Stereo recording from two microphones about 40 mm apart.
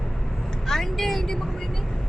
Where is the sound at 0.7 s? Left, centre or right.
Centre.